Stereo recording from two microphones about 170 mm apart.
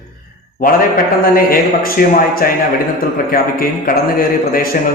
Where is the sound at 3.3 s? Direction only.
60° left (ahead or behind).